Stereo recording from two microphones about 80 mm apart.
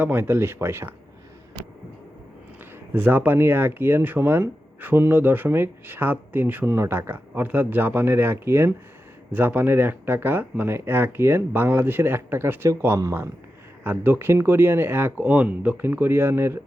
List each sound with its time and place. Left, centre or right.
0.0 s speech: right
2.9 s speech: right